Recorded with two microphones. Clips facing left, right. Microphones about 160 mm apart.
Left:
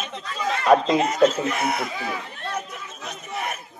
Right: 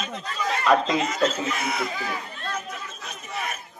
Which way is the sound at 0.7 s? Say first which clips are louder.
Left 4 dB; 45° left (ahead or behind).